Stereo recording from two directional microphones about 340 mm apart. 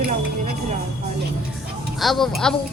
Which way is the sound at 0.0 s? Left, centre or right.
Right.